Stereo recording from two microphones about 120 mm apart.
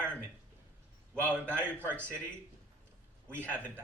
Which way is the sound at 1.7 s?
10° left (ahead or behind).